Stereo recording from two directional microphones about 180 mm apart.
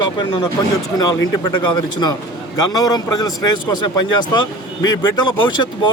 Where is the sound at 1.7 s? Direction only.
25° left (ahead or behind).